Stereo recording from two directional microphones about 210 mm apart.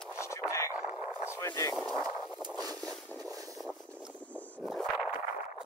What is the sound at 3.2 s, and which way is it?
Vehicle, 15° right (ahead or behind).